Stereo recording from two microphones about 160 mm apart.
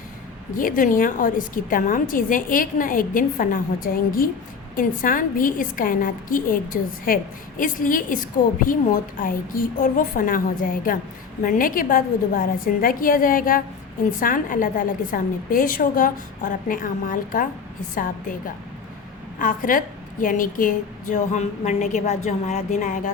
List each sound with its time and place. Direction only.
0.5 s a woman's voice: 60° left (ahead or behind)